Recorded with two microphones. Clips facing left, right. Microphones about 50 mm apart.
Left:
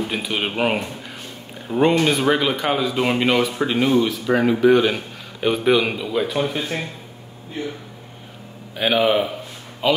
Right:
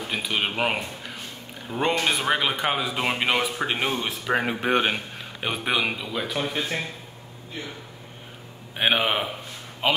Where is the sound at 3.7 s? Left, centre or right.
Right.